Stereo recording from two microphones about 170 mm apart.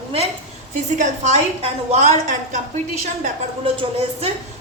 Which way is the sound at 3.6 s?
35° right (ahead or behind).